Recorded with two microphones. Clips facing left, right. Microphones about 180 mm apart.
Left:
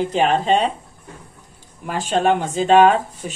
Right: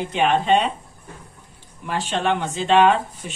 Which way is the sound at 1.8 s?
40° left (ahead or behind).